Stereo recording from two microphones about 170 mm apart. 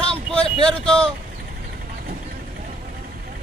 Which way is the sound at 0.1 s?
5° left (ahead or behind).